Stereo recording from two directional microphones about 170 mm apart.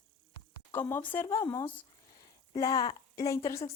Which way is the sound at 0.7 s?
10° left (ahead or behind).